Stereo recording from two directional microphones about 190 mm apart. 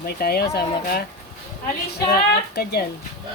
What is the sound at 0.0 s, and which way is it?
Speech, 55° left (ahead or behind).